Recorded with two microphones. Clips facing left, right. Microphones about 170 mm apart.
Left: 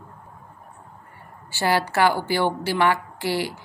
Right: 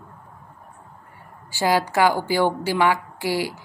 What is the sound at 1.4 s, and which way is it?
A woman's voice, 10° right (ahead or behind).